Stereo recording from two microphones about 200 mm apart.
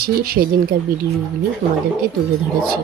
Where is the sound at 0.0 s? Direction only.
50° right (ahead or behind).